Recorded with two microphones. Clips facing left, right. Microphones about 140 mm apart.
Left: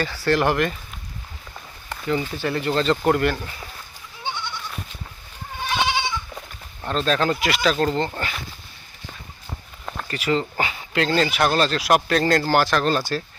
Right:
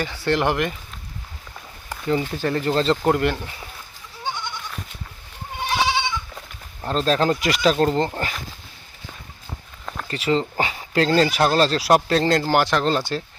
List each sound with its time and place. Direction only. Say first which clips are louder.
0.0 s speech: left 1 dB; 20° right (ahead or behind)
2.0 s speech: right 2 dB; 35° right (ahead or behind)
3.1 s speech: left 1 dB; 20° right (ahead or behind)
4.2 s goat: right 1 dB; 40° right (ahead or behind)
6.8 s speech: right 2 dB; 35° right (ahead or behind)
10.1 s speech: right 1 dB; 30° right (ahead or behind)